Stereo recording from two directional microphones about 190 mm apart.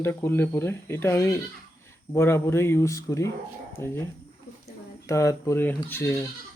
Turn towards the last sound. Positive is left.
turn(degrees=15)  # may be behind; listen again after turning